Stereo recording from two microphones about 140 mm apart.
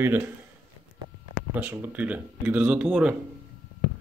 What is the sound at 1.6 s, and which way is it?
Speech, 15° right (ahead or behind).